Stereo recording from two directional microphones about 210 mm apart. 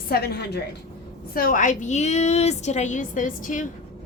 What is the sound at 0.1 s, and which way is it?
A woman's voice, 50° left (ahead or behind).